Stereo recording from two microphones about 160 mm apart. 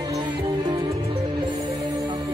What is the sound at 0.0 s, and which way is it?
Music, 25° right (ahead or behind).